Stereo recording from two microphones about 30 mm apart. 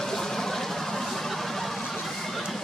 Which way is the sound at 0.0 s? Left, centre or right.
Centre.